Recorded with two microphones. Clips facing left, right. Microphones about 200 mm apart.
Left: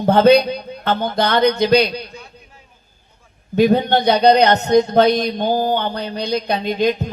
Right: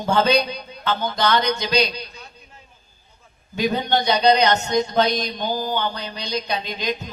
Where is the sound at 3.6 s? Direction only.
60° left (ahead or behind).